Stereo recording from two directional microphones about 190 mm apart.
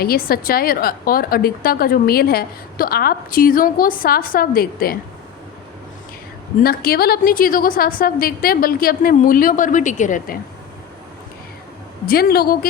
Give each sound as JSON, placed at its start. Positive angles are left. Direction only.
{"t": 0.0, "sound": "a woman's voice", "side_deg": 50}
{"t": 6.6, "sound": "a woman's voice", "side_deg": 55}
{"t": 12.0, "sound": "a woman's voice", "side_deg": 50}